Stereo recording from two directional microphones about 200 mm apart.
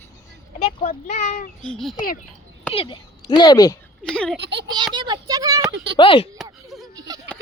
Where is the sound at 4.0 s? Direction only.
5° left (ahead or behind).